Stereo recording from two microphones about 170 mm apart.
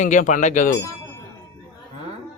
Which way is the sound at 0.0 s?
45° left (ahead or behind).